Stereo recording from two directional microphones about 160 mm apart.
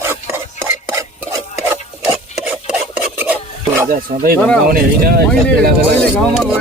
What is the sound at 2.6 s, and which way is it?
Filing, 10° right (ahead or behind).